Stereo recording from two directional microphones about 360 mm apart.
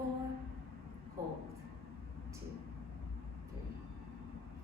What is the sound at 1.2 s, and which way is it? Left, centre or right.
Speech, centre.